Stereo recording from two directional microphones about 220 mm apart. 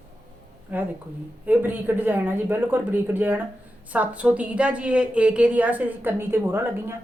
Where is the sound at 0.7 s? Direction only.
5° right (ahead or behind).